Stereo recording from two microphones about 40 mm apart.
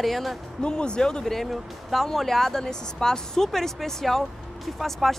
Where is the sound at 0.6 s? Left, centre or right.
Left.